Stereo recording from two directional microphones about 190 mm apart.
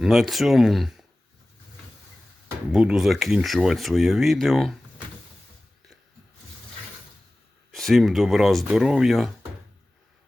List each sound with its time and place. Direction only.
0.0 s speech: centre (ahead or behind)
2.7 s speech: centre (ahead or behind)
7.7 s speech: centre (ahead or behind)